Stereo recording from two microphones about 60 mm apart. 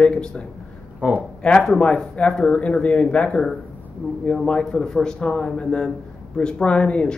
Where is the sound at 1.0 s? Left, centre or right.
Right.